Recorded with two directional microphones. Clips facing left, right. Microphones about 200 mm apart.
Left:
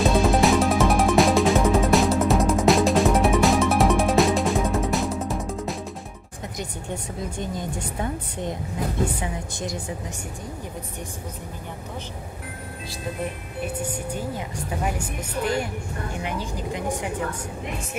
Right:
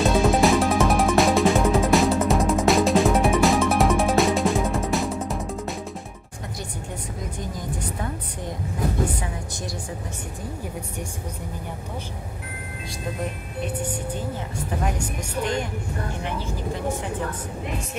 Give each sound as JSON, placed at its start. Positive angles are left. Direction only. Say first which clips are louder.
{"t": 0.0, "sound": "music", "louder": "even", "side_deg": 0}
{"t": 14.7, "sound": "music", "louder": "right 1 dB", "side_deg": 5}
{"t": 16.3, "sound": "vehicle", "louder": "left 1 dB", "side_deg": 15}